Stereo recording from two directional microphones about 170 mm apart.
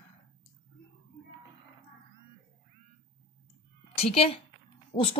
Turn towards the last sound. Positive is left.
turn(degrees=30)  # may be behind; listen again after turning